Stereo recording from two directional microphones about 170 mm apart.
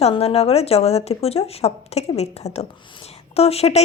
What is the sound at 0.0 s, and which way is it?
A woman's voice, 35° left (ahead or behind).